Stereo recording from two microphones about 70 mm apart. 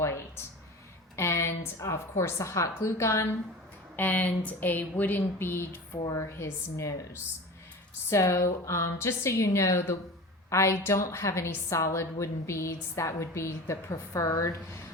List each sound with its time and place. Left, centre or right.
0.0 s a sound: left
1.1 s a woman's voice: left
3.9 s speech: left
6.1 s a woman's voice: left